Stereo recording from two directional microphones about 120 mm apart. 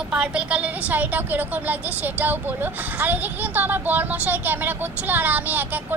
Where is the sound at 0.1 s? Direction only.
10° right (ahead or behind).